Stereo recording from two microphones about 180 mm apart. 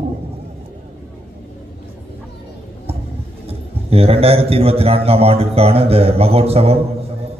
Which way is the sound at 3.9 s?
35° right (ahead or behind).